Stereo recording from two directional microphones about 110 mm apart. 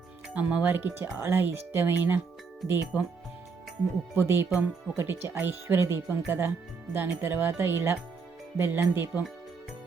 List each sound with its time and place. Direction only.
0.3 s speech: 15° right (ahead or behind)
4.1 s speech: 20° right (ahead or behind)